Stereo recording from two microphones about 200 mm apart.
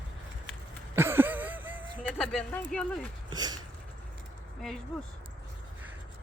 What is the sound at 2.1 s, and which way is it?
Speech, 5° left (ahead or behind).